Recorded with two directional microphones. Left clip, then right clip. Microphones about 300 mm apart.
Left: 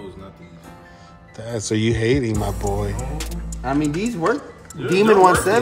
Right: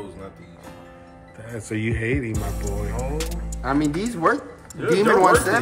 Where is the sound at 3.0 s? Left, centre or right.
Centre.